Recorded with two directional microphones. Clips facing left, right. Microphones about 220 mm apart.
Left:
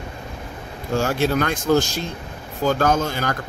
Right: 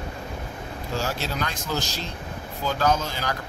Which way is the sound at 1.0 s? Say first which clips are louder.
Left 9 dB; 55° left (ahead or behind).